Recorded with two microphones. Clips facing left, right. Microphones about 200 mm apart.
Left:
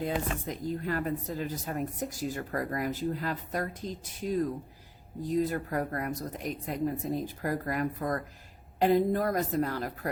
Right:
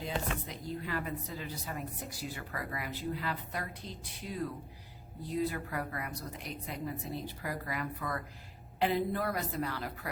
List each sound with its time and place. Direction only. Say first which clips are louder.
0.4 s speech: left 7 dB; 45° left (ahead or behind)